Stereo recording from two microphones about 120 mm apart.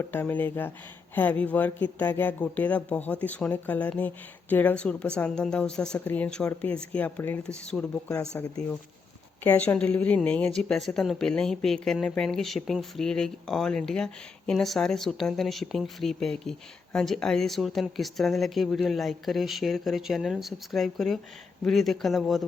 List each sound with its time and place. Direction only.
0.0 s speech: 15° left (ahead or behind)
9.4 s speech: 15° left (ahead or behind)